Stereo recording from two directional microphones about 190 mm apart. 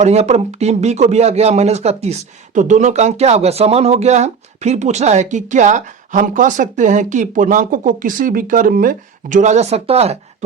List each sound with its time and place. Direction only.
0.0 s speech: 35° right (ahead or behind)